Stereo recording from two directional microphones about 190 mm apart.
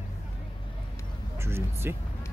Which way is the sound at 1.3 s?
15° right (ahead or behind).